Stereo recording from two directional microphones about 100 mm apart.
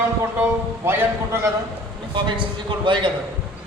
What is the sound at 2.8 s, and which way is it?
Speech, 55° right (ahead or behind).